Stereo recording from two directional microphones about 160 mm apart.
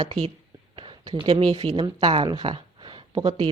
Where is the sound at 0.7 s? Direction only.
30° right (ahead or behind).